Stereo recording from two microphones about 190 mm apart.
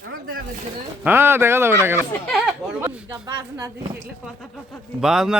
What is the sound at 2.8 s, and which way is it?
Speech, 15° right (ahead or behind).